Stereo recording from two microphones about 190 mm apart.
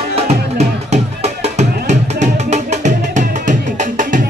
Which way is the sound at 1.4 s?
35° right (ahead or behind).